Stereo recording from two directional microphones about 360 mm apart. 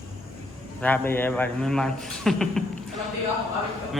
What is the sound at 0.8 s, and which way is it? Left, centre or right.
A man's voice, centre.